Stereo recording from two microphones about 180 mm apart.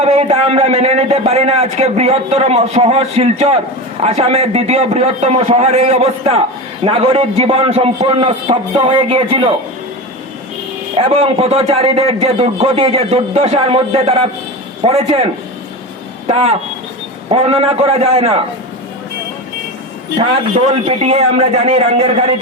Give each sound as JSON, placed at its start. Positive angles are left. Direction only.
{"t": 0.0, "sound": "a man's voice", "side_deg": -35}
{"t": 10.9, "sound": "a man's voice", "side_deg": -30}
{"t": 20.1, "sound": "a man's voice", "side_deg": -35}